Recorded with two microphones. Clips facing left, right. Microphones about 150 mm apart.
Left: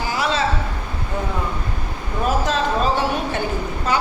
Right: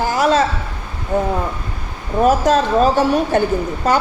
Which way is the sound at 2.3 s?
45° right (ahead or behind).